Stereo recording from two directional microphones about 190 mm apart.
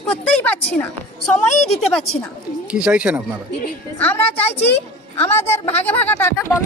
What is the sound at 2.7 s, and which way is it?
Speech, 5° right (ahead or behind).